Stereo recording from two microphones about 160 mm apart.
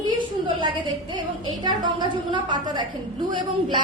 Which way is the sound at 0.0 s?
30° right (ahead or behind).